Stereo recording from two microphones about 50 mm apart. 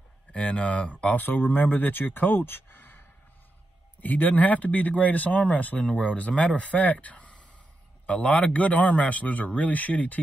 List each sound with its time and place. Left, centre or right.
0.3 s speech: left